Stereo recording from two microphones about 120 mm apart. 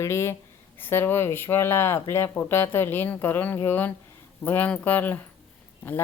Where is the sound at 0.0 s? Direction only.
20° left (ahead or behind).